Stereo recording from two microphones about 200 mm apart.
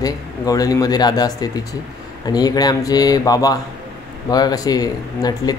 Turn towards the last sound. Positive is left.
turn(degrees=20)  # may be behind; listen again after turning